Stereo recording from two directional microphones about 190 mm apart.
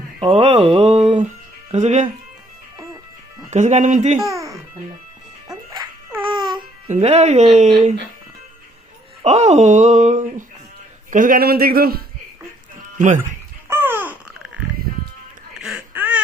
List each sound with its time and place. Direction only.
0.2 s speech: 30° right (ahead or behind)
3.5 s speech: 35° right (ahead or behind)
4.3 s music: 15° right (ahead or behind)
6.2 s babbling: 25° right (ahead or behind)
6.8 s speech: 35° right (ahead or behind)
9.2 s a man's voice: 35° right (ahead or behind); by 12.0 s 50° right (ahead or behind)
13.7 s babbling: 10° right (ahead or behind)
15.5 s a sound: 5° right (ahead or behind)